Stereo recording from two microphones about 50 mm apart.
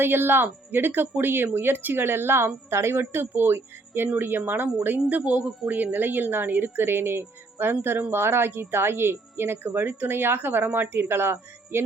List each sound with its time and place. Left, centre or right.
0.0 s a woman's voice: right
4.9 s a woman's voice: right